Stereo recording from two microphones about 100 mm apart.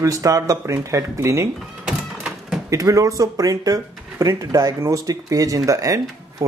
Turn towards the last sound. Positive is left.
turn(degrees=-35)  # may be behind; listen again after turning